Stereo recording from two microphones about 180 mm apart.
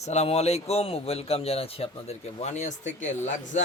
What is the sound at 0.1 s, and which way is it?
Speech, 35° left (ahead or behind).